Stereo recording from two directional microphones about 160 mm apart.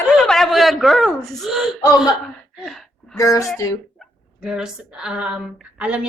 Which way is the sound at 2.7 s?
Centre (ahead or behind).